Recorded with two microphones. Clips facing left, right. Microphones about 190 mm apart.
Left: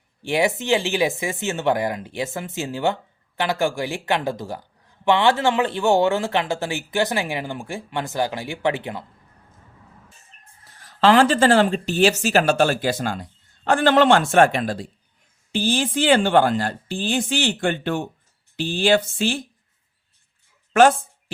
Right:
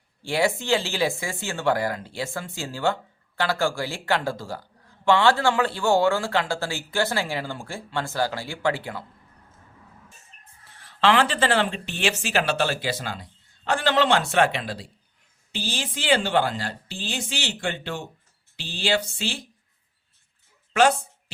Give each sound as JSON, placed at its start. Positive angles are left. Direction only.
{"t": 0.2, "sound": "speech", "side_deg": 20}
{"t": 10.8, "sound": "a woman's voice", "side_deg": 40}
{"t": 20.7, "sound": "a sound", "side_deg": 50}